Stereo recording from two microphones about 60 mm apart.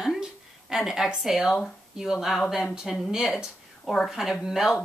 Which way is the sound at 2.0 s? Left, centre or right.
Centre.